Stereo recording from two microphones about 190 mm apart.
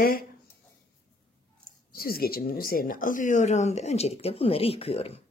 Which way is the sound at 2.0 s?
50° left (ahead or behind).